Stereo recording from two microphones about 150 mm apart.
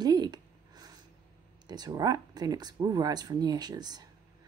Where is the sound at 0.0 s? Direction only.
25° right (ahead or behind).